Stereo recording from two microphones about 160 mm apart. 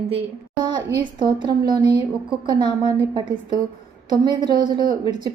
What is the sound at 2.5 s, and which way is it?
A woman's voice, 30° right (ahead or behind).